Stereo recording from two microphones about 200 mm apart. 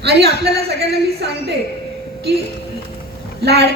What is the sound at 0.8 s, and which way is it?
Speech, 55° right (ahead or behind).